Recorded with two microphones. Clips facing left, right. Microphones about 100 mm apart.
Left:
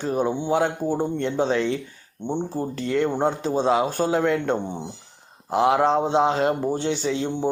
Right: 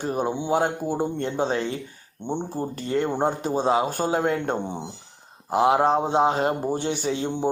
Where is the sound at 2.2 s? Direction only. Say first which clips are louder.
Left 2 dB; 15° right (ahead or behind).